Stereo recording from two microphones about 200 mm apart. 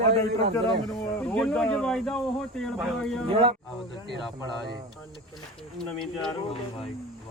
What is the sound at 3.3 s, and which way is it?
Speech, 25° right (ahead or behind).